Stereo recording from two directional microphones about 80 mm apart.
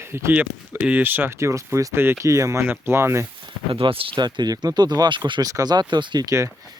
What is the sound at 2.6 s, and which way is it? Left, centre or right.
Speech, right.